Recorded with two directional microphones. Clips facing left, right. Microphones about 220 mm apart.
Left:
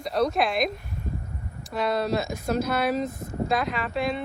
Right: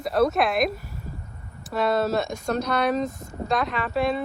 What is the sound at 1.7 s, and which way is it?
Speech, centre (ahead or behind).